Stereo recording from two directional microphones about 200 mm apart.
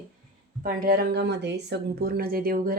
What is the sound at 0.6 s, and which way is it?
Speech, 50° right (ahead or behind).